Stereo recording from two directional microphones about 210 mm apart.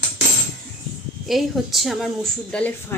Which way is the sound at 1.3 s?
Centre (ahead or behind).